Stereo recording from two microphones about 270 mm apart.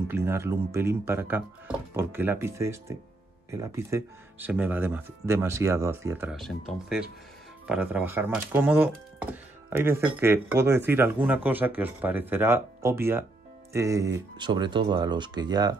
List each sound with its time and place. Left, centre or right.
0.1 s speech: centre
7.6 s speech: centre